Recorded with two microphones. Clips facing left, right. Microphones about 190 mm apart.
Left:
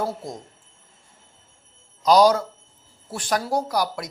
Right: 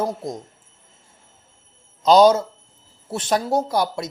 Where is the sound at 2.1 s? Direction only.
25° right (ahead or behind).